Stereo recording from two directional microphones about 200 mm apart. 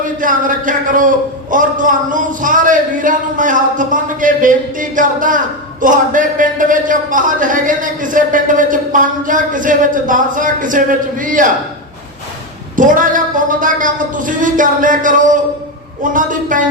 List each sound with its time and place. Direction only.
0.0 s speech: 40° right (ahead or behind)
12.7 s speech: 40° right (ahead or behind)